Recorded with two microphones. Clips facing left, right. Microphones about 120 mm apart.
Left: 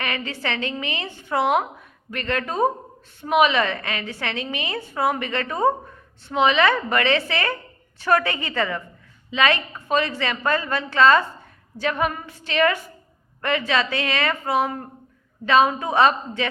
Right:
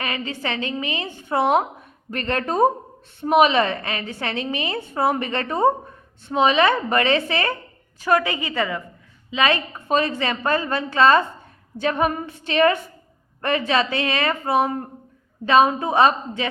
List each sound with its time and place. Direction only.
0.0 s a woman's voice: 20° right (ahead or behind)